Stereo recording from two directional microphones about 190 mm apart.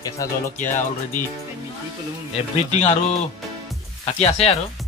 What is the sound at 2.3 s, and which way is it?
Speech, 35° left (ahead or behind).